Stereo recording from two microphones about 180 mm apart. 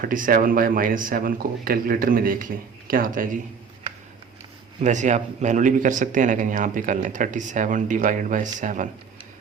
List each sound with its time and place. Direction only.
0.0 s speech: 50° right (ahead or behind)
4.8 s speech: 40° right (ahead or behind)